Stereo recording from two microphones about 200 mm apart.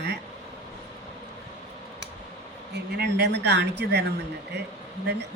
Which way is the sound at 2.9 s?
55° right (ahead or behind).